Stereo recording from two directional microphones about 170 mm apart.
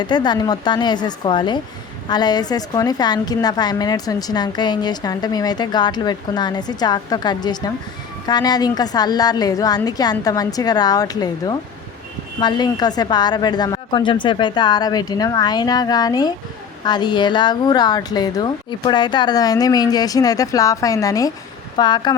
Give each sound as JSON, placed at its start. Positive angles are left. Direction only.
{"t": 0.0, "sound": "a woman's voice", "side_deg": 25}